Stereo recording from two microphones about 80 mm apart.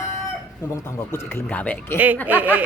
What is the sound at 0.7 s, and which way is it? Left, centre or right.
Speech, left.